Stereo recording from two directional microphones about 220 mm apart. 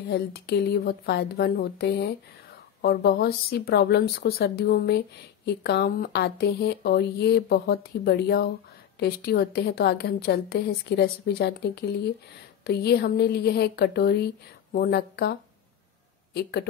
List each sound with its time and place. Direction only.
0.1 s a woman's voice: 50° left (ahead or behind)
16.3 s a woman's voice: 45° left (ahead or behind)